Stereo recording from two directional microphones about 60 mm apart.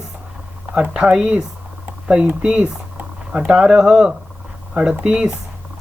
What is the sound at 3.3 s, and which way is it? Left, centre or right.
Speech, centre.